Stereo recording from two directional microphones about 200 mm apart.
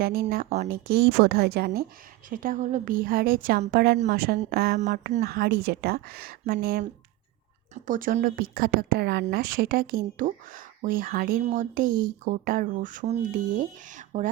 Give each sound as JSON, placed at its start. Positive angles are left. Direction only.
{"t": 0.0, "sound": "speech", "side_deg": -50}